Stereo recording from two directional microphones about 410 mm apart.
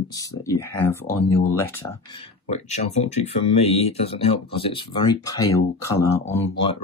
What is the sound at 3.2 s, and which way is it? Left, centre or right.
Speech, centre.